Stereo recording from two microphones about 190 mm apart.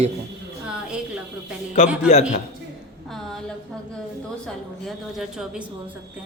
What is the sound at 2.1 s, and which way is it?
Speech, 40° left (ahead or behind).